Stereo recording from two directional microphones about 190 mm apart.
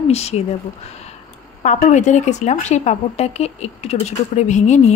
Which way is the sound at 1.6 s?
40° left (ahead or behind).